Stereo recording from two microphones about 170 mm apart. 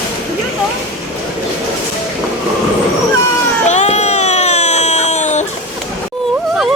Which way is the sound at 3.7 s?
45° left (ahead or behind).